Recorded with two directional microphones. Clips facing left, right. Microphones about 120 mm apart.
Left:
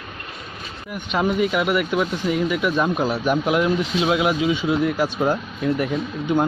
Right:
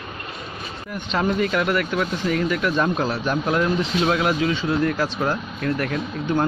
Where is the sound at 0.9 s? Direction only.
10° left (ahead or behind).